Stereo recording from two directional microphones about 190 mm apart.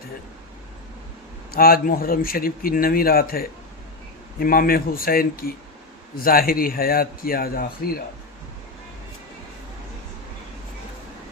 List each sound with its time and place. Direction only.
1.5 s a man's voice: 50° left (ahead or behind)